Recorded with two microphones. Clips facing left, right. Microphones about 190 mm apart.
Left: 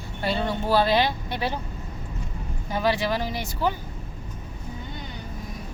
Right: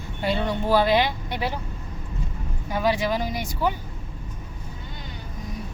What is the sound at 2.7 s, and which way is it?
Speech, 15° right (ahead or behind).